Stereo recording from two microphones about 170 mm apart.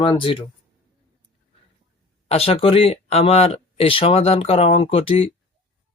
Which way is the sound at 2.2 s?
35° left (ahead or behind).